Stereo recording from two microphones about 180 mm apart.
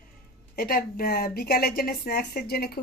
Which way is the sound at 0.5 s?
55° left (ahead or behind).